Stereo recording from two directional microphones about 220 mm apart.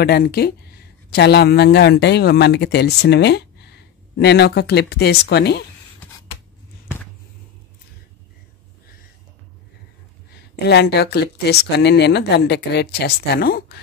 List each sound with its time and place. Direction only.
0.0 s speech: 45° left (ahead or behind)
10.5 s speech: 50° left (ahead or behind)